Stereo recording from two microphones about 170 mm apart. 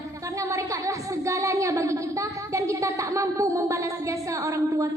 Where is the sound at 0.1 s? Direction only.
20° right (ahead or behind).